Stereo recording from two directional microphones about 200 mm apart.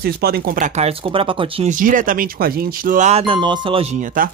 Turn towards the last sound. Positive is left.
turn(degrees=-40)  # may be behind; listen again after turning